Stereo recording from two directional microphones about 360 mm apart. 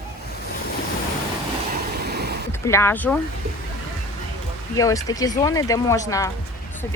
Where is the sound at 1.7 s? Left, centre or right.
Right.